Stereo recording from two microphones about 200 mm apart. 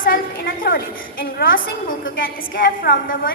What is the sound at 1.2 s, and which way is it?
A woman's voice, 45° left (ahead or behind).